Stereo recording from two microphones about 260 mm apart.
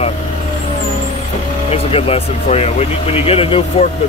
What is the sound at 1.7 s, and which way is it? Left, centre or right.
Speech, left.